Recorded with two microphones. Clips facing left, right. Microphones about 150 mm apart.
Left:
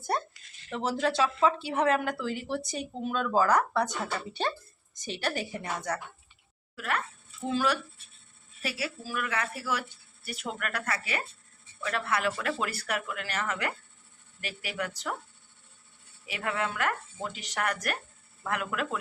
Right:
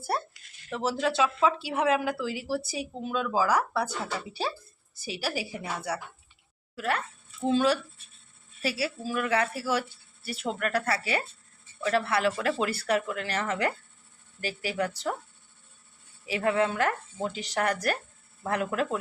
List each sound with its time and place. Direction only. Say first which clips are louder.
0.0 s a woman's voice: even; 5° right (ahead or behind)
6.7 s speech: right 3 dB; 30° right (ahead or behind)
8.8 s speech: right 4 dB; 30° right (ahead or behind)
16.2 s speech: right 7 dB; 30° right (ahead or behind)